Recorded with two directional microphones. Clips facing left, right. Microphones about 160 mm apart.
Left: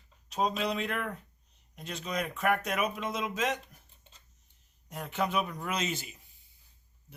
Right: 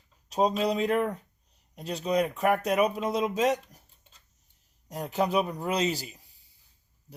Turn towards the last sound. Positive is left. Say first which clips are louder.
# right 4 dB
turn(degrees=-35)  # may be behind; listen again after turning